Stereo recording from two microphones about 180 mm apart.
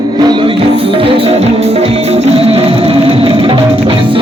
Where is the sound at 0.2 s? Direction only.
25° right (ahead or behind).